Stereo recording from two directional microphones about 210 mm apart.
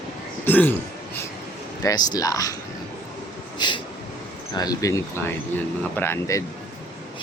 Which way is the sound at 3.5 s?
20° left (ahead or behind).